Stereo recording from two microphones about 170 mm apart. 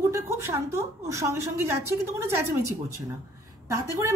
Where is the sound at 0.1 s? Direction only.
15° right (ahead or behind).